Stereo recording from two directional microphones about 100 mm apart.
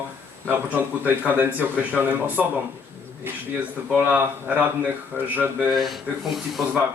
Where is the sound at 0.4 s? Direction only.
15° right (ahead or behind).